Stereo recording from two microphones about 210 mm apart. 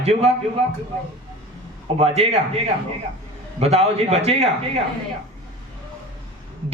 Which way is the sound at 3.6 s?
30° right (ahead or behind).